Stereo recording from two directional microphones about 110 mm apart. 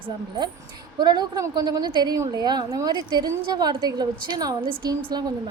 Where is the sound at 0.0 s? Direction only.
40° right (ahead or behind).